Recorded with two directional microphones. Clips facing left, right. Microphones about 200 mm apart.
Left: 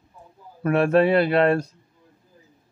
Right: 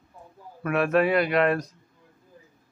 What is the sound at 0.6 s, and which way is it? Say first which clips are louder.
A man's voice: left 4 dB; 30° left (ahead or behind).